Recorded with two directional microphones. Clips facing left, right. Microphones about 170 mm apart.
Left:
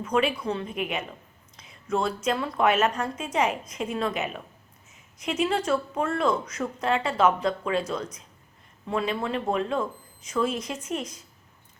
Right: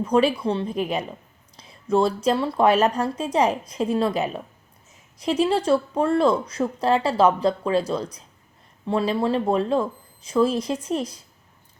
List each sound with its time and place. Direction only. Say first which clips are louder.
0.0 s speech: right 5 dB; 35° right (ahead or behind)